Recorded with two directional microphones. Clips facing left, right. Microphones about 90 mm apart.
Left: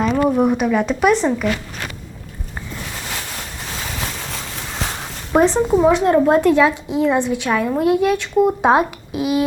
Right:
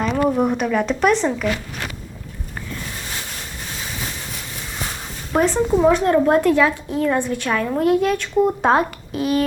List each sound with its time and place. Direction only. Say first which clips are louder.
0.0 s speech: left 2 dB; 5° left (ahead or behind)
5.3 s a woman's voice: left 3 dB; 20° left (ahead or behind)